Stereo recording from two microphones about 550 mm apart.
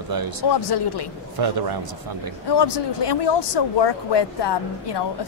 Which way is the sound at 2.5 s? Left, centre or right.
Left.